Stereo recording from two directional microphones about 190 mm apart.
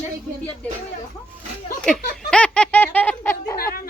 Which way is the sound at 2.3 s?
5° left (ahead or behind).